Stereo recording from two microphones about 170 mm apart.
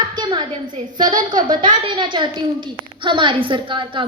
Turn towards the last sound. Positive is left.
turn(degrees=-30)  # may be behind; listen again after turning